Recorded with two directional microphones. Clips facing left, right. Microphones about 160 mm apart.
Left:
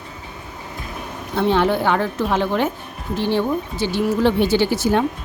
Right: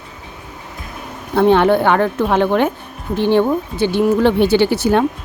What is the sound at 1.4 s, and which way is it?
Speech, 60° right (ahead or behind).